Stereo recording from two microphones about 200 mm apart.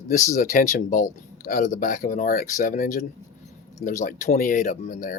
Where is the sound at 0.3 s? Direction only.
40° left (ahead or behind).